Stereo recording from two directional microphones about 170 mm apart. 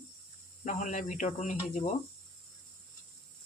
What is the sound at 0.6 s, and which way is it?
Speech, 45° left (ahead or behind).